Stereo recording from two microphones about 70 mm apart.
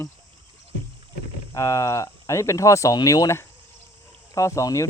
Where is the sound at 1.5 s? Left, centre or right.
Left.